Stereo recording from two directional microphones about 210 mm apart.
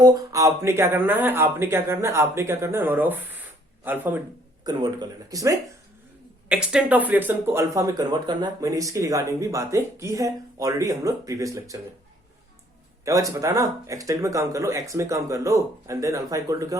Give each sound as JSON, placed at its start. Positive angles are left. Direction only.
{"t": 0.0, "sound": "speech", "side_deg": -15}
{"t": 4.6, "sound": "speech", "side_deg": -20}
{"t": 6.5, "sound": "speech", "side_deg": -5}
{"t": 13.1, "sound": "speech", "side_deg": -15}